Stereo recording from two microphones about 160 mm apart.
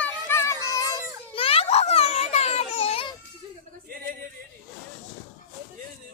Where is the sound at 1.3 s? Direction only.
35° left (ahead or behind).